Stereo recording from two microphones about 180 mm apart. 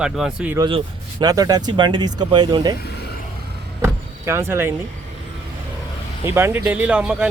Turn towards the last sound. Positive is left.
turn(degrees=-5)  # may be behind; listen again after turning